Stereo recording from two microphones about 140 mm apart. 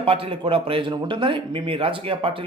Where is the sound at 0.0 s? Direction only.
40° right (ahead or behind).